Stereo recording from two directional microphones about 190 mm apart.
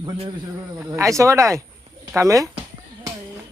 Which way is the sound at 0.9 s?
15° right (ahead or behind).